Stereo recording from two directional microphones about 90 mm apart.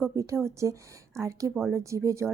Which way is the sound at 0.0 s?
30° right (ahead or behind).